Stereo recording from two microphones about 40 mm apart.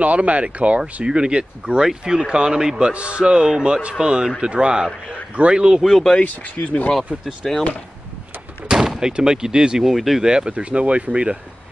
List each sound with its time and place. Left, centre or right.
0.0 s a man's voice: right
5.8 s speech: centre
6.2 s speech: left
7.4 s speech: centre
8.6 s speech: centre
9.8 s speech: centre
10.2 s a man's voice: right